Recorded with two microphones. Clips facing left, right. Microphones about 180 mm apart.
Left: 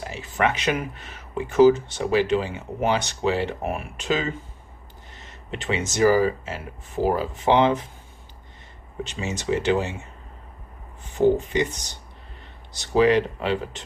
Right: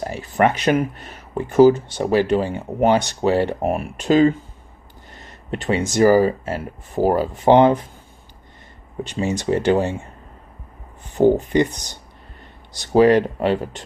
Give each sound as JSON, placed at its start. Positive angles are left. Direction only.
{"t": 0.0, "sound": "speech", "side_deg": -40}
{"t": 5.5, "sound": "speech", "side_deg": -45}
{"t": 9.2, "sound": "speech", "side_deg": -50}
{"t": 11.2, "sound": "speech", "side_deg": -45}
{"t": 12.9, "sound": "speech", "side_deg": -45}